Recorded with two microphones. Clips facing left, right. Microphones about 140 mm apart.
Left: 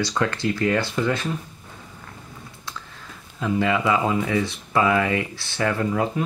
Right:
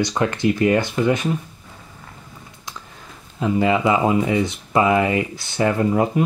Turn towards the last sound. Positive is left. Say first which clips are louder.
# right 5 dB
turn(degrees=-25)  # may be behind; listen again after turning